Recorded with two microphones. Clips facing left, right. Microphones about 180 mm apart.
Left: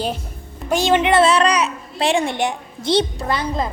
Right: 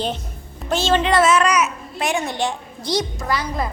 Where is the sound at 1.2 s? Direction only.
30° left (ahead or behind).